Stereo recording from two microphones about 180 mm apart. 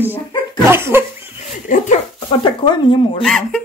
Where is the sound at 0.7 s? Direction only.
15° right (ahead or behind).